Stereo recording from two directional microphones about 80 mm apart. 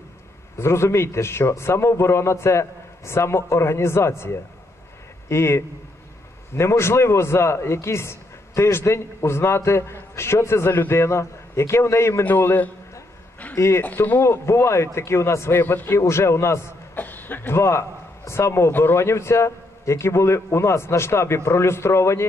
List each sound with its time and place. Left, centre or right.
0.6 s a man's voice: left
13.6 s speech: left
13.8 s a man's voice: left
14.2 s speech: left
16.9 s speech: left